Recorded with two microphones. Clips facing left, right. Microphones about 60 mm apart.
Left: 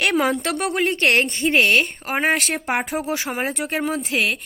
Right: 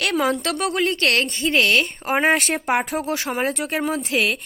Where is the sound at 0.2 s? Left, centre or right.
Centre.